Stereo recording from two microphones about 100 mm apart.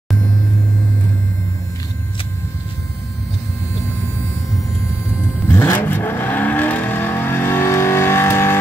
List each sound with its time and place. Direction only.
5.5 s vehicle: 20° left (ahead or behind)